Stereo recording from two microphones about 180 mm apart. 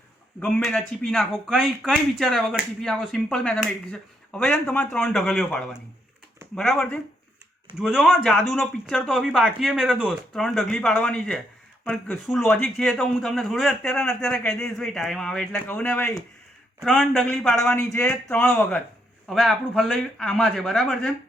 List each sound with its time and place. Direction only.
0.3 s a man's voice: 5° left (ahead or behind)